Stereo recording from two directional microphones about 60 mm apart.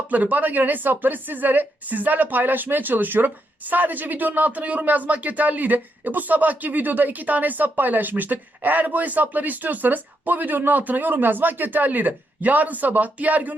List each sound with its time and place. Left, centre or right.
0.1 s a woman's voice: right